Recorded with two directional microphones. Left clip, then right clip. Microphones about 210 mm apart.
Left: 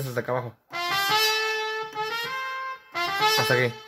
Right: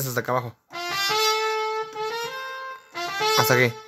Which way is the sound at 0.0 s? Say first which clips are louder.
Right 3 dB; 30° right (ahead or behind).